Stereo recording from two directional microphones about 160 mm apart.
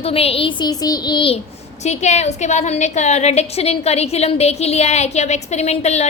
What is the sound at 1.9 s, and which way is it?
A woman's voice, 45° left (ahead or behind).